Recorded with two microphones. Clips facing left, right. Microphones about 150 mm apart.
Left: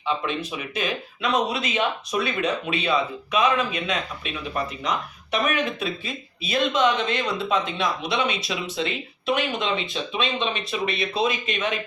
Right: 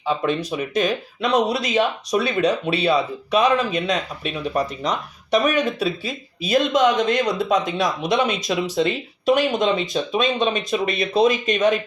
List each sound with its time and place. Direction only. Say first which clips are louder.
0.0 s speech: right 5 dB; 40° right (ahead or behind)